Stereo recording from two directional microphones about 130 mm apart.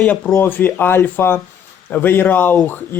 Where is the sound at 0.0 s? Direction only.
10° left (ahead or behind).